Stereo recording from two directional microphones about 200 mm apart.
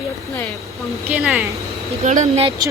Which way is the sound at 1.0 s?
5° right (ahead or behind).